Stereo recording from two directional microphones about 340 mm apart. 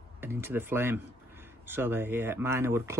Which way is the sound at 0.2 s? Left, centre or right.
Centre.